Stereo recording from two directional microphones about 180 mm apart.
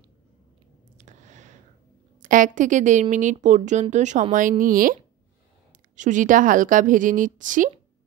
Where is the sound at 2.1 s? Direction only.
45° right (ahead or behind).